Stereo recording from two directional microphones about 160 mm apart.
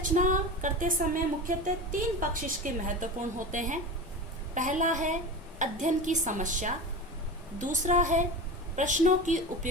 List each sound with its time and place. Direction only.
0.0 s a woman's voice: 55° right (ahead or behind)